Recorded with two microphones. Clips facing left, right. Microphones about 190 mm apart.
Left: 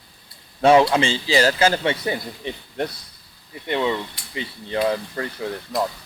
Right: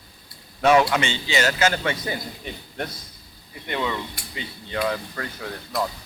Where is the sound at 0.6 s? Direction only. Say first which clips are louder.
Left 3 dB; 30° left (ahead or behind).